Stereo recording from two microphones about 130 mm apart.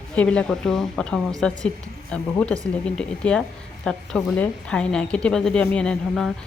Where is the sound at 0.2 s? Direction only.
10° left (ahead or behind).